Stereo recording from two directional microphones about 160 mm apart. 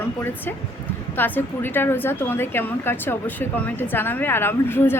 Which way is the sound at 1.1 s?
10° left (ahead or behind).